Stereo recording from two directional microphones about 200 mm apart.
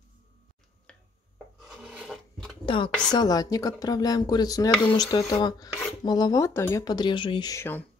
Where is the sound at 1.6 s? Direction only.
Centre (ahead or behind).